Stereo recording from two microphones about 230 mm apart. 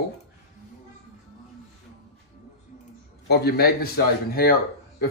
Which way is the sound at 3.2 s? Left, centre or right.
Left.